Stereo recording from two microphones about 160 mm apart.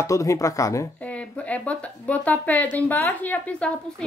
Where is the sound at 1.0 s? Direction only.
10° left (ahead or behind).